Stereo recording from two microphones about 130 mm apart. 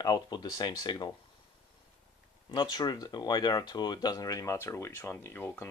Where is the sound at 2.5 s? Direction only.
30° left (ahead or behind); by 5.7 s 15° left (ahead or behind).